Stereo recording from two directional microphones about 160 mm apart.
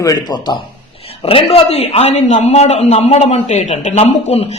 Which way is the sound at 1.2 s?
35° left (ahead or behind).